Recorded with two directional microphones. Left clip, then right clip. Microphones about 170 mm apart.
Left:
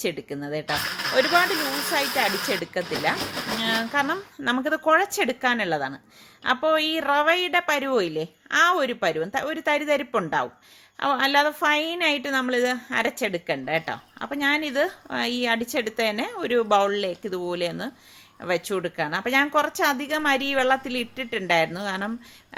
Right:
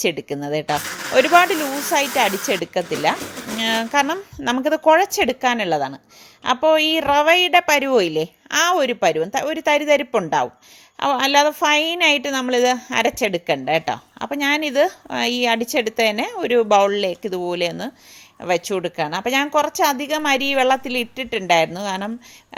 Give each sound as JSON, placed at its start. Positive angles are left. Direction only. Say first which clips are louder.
{"t": 0.0, "sound": "a woman's voice", "louder": "right 7 dB", "side_deg": -35}